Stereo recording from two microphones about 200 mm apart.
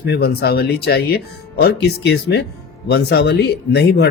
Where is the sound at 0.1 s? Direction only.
55° left (ahead or behind).